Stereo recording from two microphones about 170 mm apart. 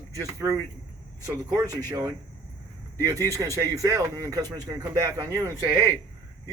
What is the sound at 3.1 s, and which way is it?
A man's voice, 20° right (ahead or behind).